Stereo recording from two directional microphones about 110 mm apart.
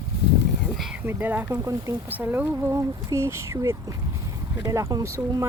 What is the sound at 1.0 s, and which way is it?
Speech, 15° right (ahead or behind).